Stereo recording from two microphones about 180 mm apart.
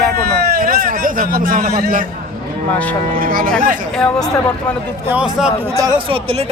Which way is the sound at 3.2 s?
50° right (ahead or behind).